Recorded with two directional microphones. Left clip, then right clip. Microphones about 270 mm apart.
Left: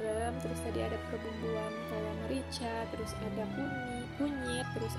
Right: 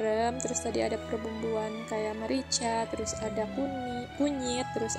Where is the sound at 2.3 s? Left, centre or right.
Right.